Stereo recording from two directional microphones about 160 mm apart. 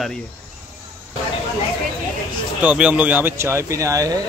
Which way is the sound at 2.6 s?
10° right (ahead or behind).